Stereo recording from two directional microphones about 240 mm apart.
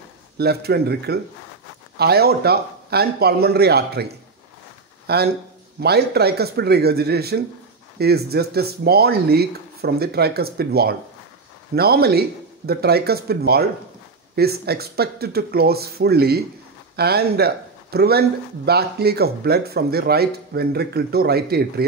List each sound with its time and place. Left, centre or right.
0.4 s speech: right